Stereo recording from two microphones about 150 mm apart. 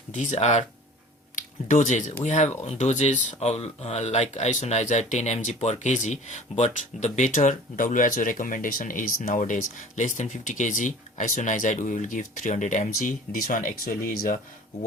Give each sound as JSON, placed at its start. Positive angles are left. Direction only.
{"t": 0.1, "sound": "speech", "side_deg": 55}
{"t": 1.4, "sound": "speech", "side_deg": 60}